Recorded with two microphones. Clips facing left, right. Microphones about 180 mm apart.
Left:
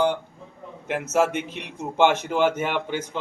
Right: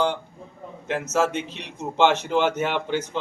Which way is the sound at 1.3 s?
55° left (ahead or behind).